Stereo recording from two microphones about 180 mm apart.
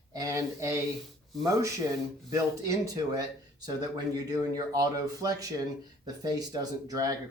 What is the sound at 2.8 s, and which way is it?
Speech, 20° right (ahead or behind).